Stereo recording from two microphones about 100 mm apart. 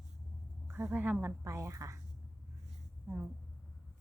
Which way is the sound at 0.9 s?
15° right (ahead or behind).